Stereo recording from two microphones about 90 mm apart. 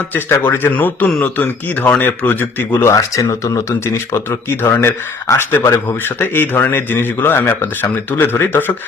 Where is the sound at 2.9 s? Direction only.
35° left (ahead or behind).